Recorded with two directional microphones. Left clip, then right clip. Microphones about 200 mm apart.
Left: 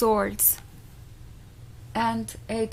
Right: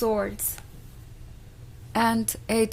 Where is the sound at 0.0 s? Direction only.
30° left (ahead or behind).